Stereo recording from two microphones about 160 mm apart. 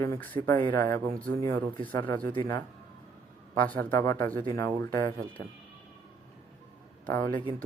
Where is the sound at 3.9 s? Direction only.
15° left (ahead or behind).